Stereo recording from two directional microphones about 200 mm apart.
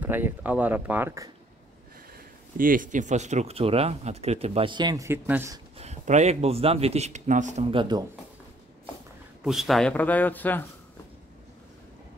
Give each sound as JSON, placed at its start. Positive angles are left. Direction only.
{"t": 0.0, "sound": "speech", "side_deg": -10}
{"t": 2.1, "sound": "speech", "side_deg": -45}
{"t": 5.8, "sound": "speech", "side_deg": -35}
{"t": 9.4, "sound": "a man's voice", "side_deg": 0}